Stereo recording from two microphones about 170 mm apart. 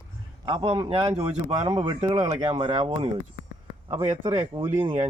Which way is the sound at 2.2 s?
40° right (ahead or behind).